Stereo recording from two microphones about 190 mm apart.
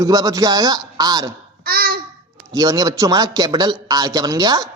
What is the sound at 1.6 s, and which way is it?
Babbling, 50° right (ahead or behind).